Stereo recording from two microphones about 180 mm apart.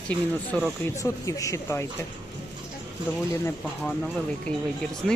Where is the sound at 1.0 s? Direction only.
20° left (ahead or behind).